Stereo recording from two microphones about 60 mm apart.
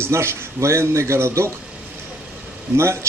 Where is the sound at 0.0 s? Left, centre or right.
Right.